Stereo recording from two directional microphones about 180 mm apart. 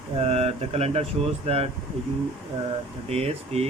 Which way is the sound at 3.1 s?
35° right (ahead or behind).